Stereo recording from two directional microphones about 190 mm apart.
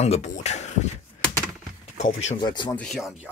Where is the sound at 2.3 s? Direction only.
25° left (ahead or behind).